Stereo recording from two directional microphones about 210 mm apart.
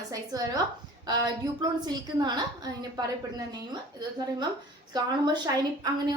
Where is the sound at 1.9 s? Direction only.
20° right (ahead or behind).